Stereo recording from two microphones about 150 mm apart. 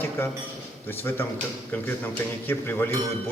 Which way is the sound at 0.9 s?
15° left (ahead or behind).